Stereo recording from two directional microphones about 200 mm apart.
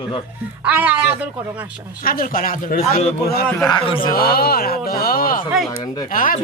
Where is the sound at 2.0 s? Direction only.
45° left (ahead or behind).